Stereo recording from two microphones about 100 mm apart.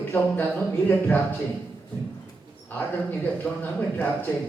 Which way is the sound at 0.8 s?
20° left (ahead or behind).